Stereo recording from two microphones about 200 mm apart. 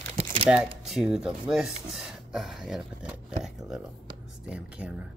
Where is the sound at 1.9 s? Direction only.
Centre (ahead or behind).